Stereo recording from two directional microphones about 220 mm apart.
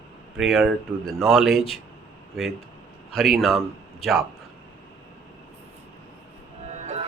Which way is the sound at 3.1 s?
Centre (ahead or behind).